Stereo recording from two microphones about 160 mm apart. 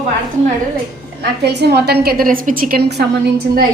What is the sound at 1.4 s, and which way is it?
A woman's voice, 90° right.